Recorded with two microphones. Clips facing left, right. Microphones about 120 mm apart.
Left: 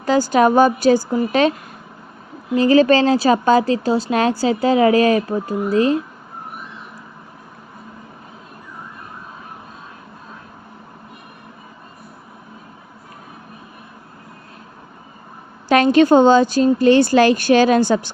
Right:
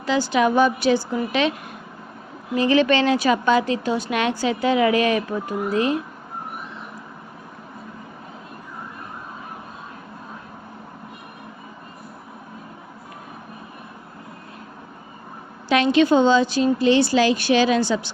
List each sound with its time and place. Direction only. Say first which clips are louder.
0.0 s a woman's voice: left 5 dB; 45° left (ahead or behind)
2.6 s a woman's voice: left 5 dB; 40° left (ahead or behind)
15.7 s a woman's voice: left 5 dB; 45° left (ahead or behind)